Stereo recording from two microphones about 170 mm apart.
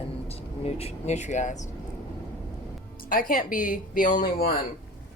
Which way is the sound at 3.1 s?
55° left (ahead or behind).